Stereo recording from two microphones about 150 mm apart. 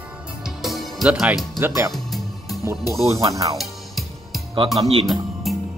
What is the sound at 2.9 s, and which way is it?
Speech, 20° right (ahead or behind).